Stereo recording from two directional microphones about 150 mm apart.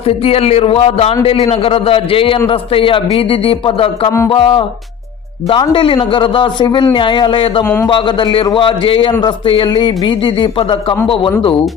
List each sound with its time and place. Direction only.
0.1 s speech: 40° left (ahead or behind)
7.6 s a man's voice: 15° left (ahead or behind)
7.9 s speech: 35° left (ahead or behind)